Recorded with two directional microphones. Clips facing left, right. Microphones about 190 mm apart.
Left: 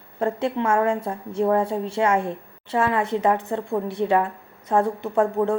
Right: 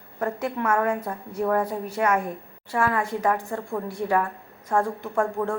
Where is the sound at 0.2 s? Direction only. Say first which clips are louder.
Left 4 dB; 25° left (ahead or behind).